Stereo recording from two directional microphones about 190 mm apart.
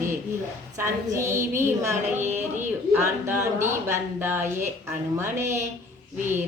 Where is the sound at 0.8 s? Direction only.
15° right (ahead or behind).